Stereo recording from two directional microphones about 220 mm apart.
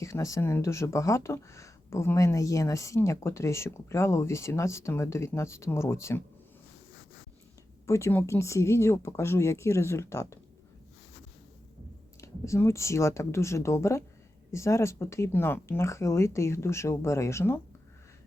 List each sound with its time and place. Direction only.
0.0 s speech: 15° left (ahead or behind)
7.9 s speech: 15° left (ahead or behind)
12.2 s speech: 10° left (ahead or behind)